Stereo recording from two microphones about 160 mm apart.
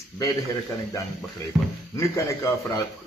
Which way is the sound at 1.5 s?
20° right (ahead or behind).